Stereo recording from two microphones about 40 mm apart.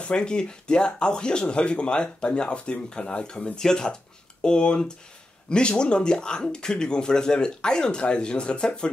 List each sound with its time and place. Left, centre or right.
0.0 s speech: left